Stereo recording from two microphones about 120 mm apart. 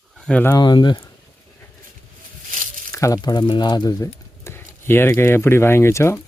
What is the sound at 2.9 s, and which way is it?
Speech, 25° left (ahead or behind).